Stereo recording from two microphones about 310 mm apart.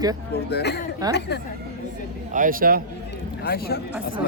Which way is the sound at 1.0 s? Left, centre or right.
Centre.